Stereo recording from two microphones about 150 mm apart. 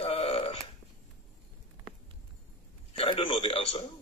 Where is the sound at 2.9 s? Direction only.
35° left (ahead or behind).